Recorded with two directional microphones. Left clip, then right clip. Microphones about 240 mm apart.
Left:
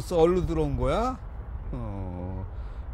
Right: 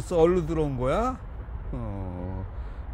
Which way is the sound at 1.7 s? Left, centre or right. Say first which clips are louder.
Right 1 dB; centre.